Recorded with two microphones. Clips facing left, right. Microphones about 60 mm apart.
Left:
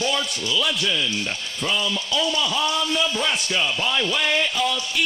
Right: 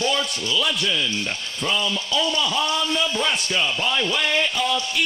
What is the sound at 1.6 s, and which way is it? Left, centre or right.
Speech, centre.